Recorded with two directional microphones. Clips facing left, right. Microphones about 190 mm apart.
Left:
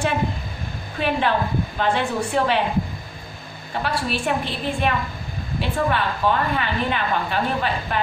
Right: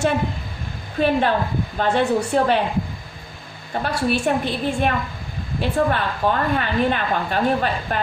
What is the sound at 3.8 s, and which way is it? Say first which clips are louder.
Speech: right 4 dB; 45° right (ahead or behind).